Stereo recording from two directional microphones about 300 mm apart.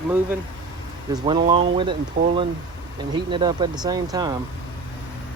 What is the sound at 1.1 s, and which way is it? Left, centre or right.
Speech, centre.